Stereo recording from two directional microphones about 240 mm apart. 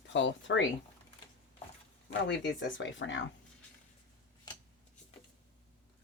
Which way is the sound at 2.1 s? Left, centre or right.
Left.